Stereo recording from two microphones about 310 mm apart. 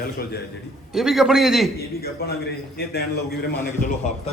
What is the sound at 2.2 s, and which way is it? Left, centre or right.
Speech, left.